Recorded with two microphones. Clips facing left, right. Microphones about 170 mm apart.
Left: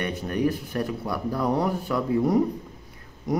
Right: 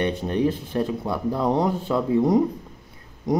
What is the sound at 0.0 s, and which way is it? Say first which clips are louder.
Speech: right 3 dB; 25° right (ahead or behind).